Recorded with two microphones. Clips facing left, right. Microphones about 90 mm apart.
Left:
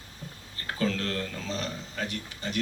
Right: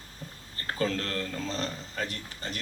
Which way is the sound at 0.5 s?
40° right (ahead or behind).